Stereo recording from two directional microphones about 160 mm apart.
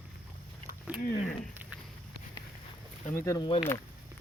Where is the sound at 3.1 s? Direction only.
20° left (ahead or behind).